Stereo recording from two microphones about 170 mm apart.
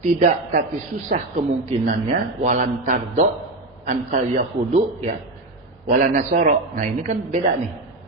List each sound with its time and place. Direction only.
0.0 s speech: 50° right (ahead or behind)